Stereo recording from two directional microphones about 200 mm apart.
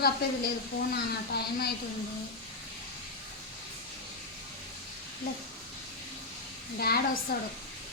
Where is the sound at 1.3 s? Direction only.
50° left (ahead or behind).